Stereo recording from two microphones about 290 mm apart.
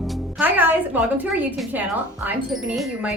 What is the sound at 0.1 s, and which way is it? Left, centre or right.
Music, centre.